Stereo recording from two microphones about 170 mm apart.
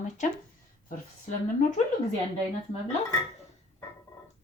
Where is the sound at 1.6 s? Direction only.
50° left (ahead or behind).